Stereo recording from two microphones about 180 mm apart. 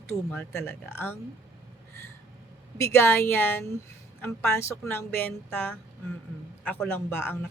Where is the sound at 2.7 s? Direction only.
15° left (ahead or behind).